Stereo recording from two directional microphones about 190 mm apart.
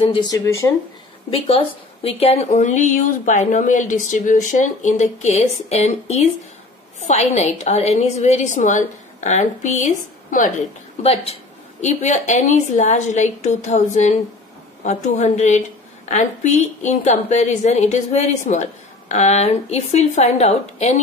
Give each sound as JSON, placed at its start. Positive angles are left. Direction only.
{"t": 0.1, "sound": "speech", "side_deg": 20}
{"t": 2.0, "sound": "a woman's voice", "side_deg": 30}